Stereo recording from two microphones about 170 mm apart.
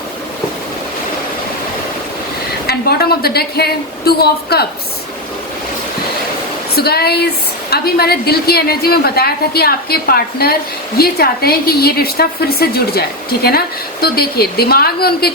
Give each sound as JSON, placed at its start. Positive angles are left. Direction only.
{"t": 2.6, "sound": "a woman's voice", "side_deg": 65}
{"t": 6.7, "sound": "a woman's voice", "side_deg": 70}